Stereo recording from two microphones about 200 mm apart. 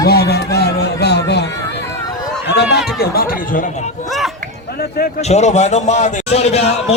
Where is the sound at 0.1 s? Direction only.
55° left (ahead or behind).